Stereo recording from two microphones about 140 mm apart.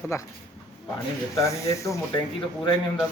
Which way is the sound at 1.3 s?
20° left (ahead or behind).